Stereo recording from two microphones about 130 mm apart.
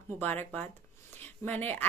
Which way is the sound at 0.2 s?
15° left (ahead or behind).